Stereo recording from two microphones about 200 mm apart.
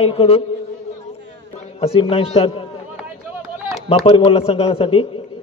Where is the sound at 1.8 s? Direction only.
30° left (ahead or behind).